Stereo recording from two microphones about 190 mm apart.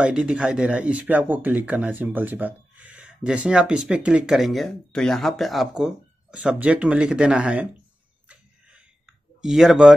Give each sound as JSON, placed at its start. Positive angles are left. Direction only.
{"t": 0.0, "sound": "speech", "side_deg": -5}
{"t": 8.3, "sound": "clicking", "side_deg": -5}